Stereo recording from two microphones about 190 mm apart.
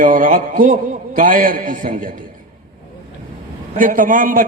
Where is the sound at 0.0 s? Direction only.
45° right (ahead or behind).